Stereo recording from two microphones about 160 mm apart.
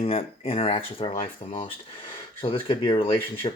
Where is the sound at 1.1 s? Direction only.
55° left (ahead or behind).